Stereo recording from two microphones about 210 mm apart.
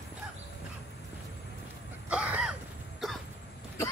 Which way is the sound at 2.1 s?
5° right (ahead or behind).